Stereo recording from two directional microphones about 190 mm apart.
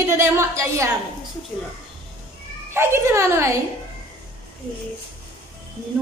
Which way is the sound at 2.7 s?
15° right (ahead or behind).